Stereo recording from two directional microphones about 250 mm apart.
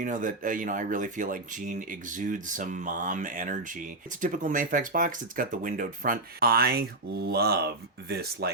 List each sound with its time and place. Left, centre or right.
0.0 s speech: right